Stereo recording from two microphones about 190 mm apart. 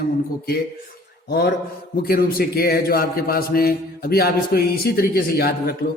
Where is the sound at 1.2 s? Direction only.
55° left (ahead or behind).